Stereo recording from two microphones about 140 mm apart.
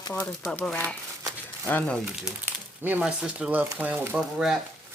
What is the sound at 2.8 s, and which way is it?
Speech, 10° right (ahead or behind).